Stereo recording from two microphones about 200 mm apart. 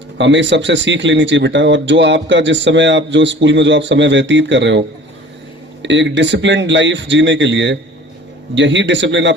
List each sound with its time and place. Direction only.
0.2 s speech: 65° right (ahead or behind)
5.8 s speech: 65° right (ahead or behind)